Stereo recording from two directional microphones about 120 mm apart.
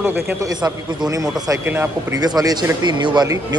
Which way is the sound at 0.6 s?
30° right (ahead or behind).